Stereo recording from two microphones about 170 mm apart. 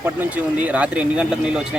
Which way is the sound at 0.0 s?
10° right (ahead or behind).